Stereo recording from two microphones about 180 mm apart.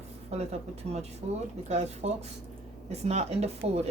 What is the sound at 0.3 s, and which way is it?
Speech, 35° right (ahead or behind).